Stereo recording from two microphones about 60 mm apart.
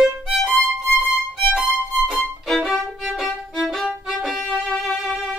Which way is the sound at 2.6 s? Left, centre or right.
Centre.